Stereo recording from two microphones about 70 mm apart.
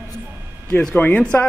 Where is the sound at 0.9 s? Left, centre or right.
Left.